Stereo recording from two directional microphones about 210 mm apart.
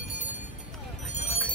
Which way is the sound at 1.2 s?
30° left (ahead or behind).